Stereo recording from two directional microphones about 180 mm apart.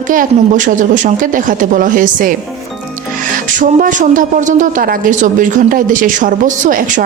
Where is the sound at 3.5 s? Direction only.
45° right (ahead or behind).